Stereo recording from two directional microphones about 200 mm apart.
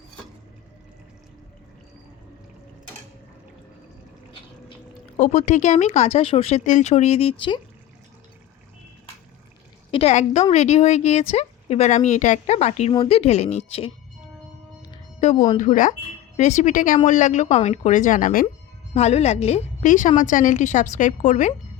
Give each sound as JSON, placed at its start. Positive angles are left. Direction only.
{"t": 5.1, "sound": "speech", "side_deg": 35}
{"t": 9.9, "sound": "speech", "side_deg": 30}
{"t": 15.2, "sound": "speech", "side_deg": 35}